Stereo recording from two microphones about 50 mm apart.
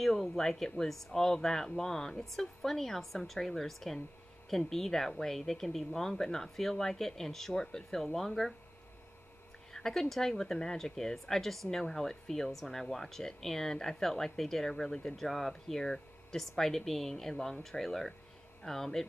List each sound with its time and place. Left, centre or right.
0.0 s speech: centre
9.7 s speech: centre